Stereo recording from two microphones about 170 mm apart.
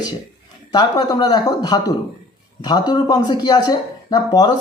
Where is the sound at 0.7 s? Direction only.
25° left (ahead or behind).